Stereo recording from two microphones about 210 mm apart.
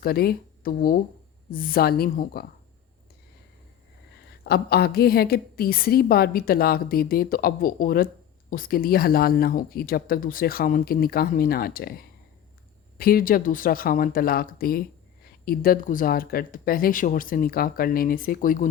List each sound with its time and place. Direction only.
0.0 s a woman's voice: 45° left (ahead or behind)
4.4 s a woman's voice: 50° left (ahead or behind)
13.0 s a woman's voice: 45° left (ahead or behind)